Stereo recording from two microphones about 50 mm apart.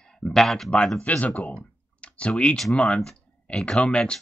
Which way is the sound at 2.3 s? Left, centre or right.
Left.